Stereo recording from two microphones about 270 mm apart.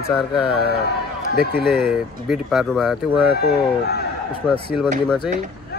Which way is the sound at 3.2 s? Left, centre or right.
Left.